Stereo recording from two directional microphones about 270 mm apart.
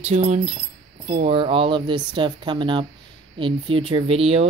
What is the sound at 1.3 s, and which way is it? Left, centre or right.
Speech, centre.